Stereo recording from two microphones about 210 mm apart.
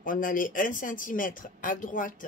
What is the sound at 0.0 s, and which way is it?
Speech, 40° left (ahead or behind).